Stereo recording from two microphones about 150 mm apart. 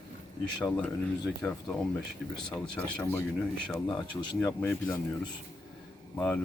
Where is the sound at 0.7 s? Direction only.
10° left (ahead or behind).